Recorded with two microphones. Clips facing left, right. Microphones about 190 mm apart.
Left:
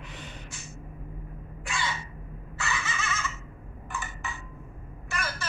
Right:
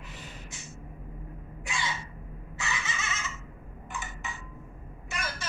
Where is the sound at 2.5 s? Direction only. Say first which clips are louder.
Left 3 dB; 20° right (ahead or behind).